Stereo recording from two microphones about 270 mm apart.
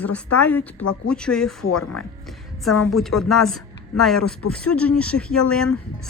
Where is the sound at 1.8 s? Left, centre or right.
Left.